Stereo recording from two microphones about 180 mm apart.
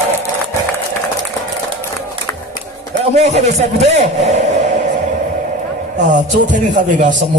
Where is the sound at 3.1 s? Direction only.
40° right (ahead or behind).